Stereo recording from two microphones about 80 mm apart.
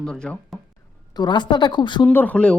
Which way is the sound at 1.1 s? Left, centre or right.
Left.